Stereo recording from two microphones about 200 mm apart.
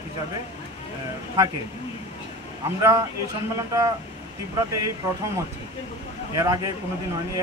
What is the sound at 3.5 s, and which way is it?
Speech, 15° right (ahead or behind).